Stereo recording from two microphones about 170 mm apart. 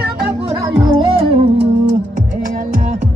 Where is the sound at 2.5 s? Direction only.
45° right (ahead or behind).